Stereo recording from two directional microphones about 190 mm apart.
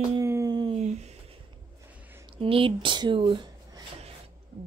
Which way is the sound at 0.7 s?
35° right (ahead or behind).